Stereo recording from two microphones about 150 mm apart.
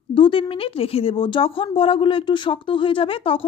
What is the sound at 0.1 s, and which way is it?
Speech, 35° left (ahead or behind).